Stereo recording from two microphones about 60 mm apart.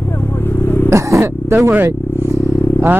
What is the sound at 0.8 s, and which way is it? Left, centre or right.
Speech, right.